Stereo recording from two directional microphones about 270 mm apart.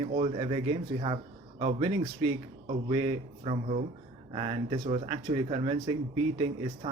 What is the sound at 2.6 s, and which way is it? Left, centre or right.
A man's voice, centre.